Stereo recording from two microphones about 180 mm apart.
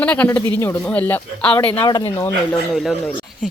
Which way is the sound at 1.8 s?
25° left (ahead or behind).